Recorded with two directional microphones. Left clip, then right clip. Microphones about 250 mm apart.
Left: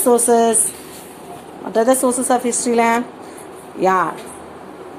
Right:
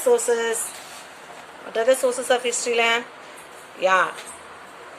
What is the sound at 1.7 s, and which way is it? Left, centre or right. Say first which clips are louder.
Speech: left 4 dB; centre.